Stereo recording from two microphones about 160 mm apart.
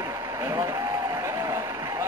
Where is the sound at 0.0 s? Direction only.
20° right (ahead or behind).